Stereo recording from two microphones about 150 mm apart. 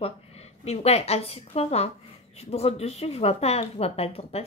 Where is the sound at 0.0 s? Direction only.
45° left (ahead or behind).